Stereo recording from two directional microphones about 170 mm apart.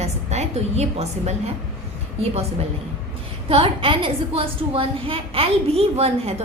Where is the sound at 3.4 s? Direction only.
35° right (ahead or behind).